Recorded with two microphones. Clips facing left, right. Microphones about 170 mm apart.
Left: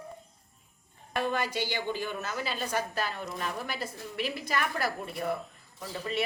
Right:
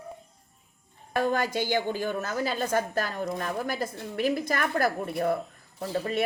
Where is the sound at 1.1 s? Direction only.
45° right (ahead or behind).